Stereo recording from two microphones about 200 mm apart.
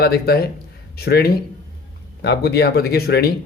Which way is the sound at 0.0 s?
50° left (ahead or behind).